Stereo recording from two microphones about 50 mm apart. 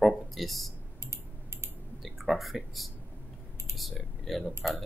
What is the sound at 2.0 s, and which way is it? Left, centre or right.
Speech, centre.